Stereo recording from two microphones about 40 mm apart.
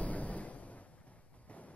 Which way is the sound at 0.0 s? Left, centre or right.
Left.